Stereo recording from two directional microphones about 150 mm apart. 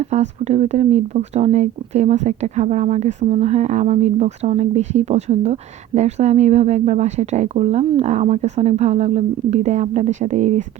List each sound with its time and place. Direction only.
0.1 s speech: 50° right (ahead or behind)